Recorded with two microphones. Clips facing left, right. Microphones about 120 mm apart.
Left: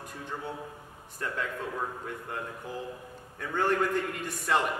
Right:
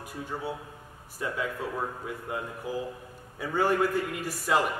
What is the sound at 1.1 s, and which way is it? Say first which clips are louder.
A man's voice: right 2 dB; 5° right (ahead or behind).